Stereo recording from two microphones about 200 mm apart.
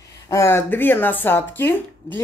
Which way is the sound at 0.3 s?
15° left (ahead or behind).